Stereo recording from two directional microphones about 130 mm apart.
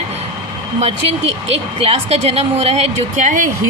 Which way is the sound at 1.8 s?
50° right (ahead or behind).